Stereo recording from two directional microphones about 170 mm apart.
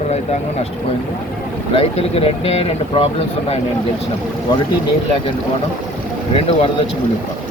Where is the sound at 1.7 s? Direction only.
35° left (ahead or behind).